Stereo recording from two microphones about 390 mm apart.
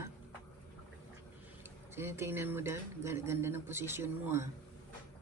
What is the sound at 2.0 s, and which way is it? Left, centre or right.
Speech, centre.